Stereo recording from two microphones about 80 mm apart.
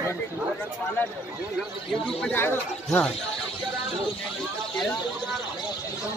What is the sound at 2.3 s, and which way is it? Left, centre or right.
Speech, left.